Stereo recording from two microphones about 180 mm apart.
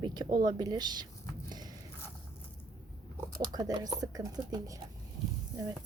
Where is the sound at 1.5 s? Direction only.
20° right (ahead or behind).